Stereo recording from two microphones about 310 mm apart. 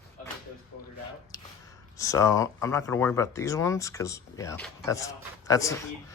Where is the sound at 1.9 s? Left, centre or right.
Centre.